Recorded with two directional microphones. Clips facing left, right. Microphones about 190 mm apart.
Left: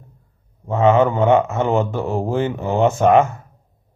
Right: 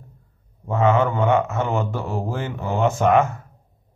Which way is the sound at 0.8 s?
20° left (ahead or behind).